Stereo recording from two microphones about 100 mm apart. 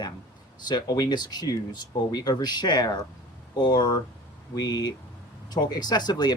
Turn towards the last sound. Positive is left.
turn(degrees=45)  # may be behind; listen again after turning